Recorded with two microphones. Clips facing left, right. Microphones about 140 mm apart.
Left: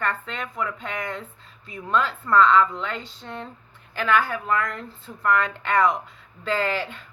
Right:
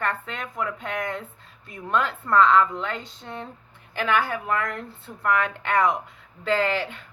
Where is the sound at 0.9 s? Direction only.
55° right (ahead or behind).